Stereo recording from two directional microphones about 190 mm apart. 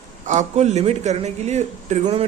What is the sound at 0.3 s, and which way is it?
Speech, 35° right (ahead or behind).